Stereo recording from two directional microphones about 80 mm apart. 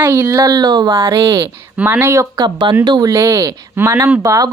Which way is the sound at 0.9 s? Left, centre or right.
Right.